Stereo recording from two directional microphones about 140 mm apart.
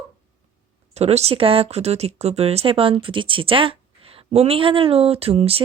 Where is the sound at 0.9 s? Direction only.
50° right (ahead or behind).